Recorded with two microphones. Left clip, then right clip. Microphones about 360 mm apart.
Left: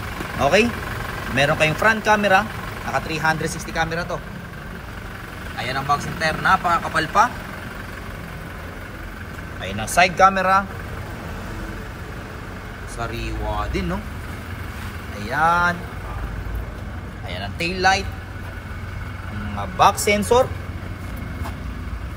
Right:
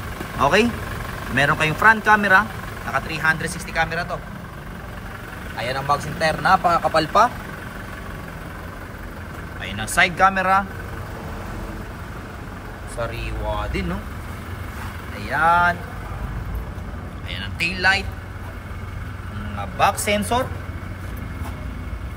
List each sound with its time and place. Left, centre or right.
0.2 s speech: centre
5.6 s speech: centre
9.6 s speech: centre
10.1 s speech: centre
13.6 s speech: centre
15.2 s speech: centre
17.6 s speech: centre
19.8 s speech: centre